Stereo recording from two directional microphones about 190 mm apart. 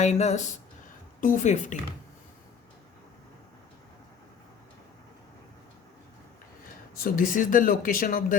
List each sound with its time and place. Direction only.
0.0 s speech: 35° left (ahead or behind)
6.9 s speech: 50° left (ahead or behind)